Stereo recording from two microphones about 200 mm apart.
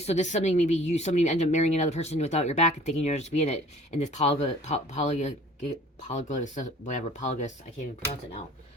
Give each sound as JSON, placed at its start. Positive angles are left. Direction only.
{"t": 0.0, "sound": "speech", "side_deg": 35}